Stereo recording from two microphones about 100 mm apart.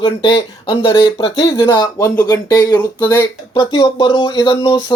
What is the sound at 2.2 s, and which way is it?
Speech, 40° left (ahead or behind).